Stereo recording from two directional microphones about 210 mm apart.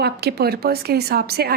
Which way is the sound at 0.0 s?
50° right (ahead or behind).